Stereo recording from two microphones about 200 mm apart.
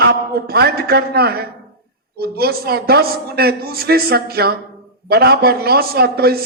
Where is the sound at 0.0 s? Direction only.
50° right (ahead or behind).